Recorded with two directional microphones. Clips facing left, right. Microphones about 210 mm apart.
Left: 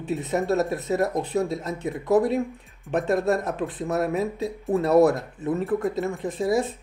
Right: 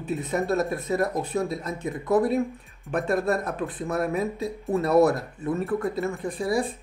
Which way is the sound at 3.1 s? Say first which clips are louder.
Left 2 dB; 20° left (ahead or behind).